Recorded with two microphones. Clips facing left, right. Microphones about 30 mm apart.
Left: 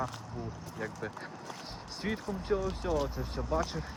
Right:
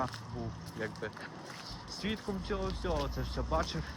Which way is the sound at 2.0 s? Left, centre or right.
Centre.